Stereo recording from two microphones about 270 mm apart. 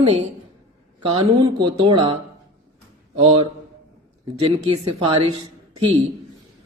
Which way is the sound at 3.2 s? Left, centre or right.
Right.